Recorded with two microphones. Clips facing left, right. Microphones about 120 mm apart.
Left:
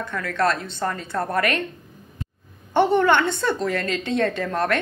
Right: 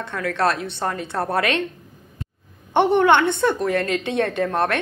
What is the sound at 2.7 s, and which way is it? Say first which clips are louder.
Speech: right 2 dB; 60° right (ahead or behind).